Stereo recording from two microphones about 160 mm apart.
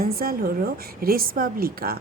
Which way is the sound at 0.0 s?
70° right (ahead or behind).